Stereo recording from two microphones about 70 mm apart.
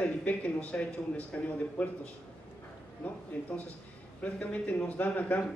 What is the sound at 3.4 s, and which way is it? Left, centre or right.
Speech, left.